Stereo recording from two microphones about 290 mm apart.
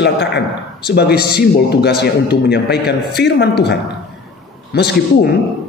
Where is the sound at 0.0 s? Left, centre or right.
Left.